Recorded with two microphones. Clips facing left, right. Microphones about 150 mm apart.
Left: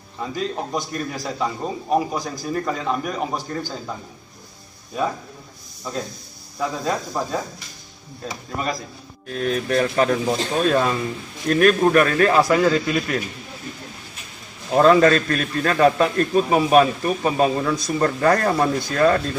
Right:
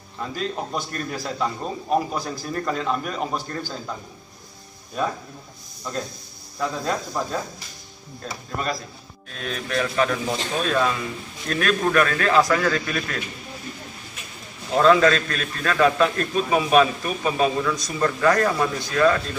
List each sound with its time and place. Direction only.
0.2 s a man's voice: 10° left (ahead or behind)
6.6 s a man's voice: 10° left (ahead or behind)
9.3 s a man's voice: 40° left (ahead or behind); by 13.2 s 20° left (ahead or behind)
14.8 s a man's voice: 35° left (ahead or behind)